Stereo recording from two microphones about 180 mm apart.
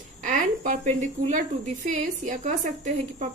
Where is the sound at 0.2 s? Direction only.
45° right (ahead or behind).